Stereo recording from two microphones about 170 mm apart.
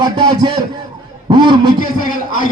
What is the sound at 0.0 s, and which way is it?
A man's voice, 25° right (ahead or behind).